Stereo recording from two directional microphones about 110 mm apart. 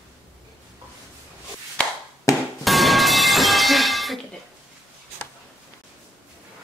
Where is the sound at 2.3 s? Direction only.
30° left (ahead or behind).